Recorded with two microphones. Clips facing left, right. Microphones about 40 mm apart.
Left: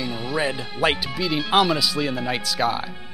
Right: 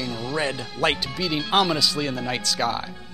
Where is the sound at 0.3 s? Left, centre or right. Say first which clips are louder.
Left 2 dB; centre.